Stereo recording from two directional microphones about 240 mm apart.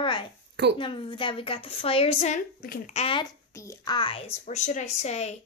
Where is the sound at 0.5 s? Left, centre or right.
Right.